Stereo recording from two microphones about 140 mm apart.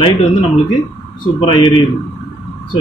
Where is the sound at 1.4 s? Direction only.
40° left (ahead or behind).